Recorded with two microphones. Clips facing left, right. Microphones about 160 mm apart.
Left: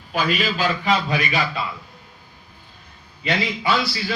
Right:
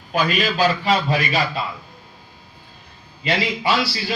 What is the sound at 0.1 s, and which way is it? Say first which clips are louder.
Speech: right 2 dB; 40° right (ahead or behind).